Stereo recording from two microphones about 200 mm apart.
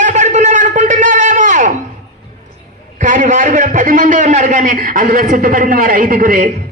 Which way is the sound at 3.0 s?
40° right (ahead or behind).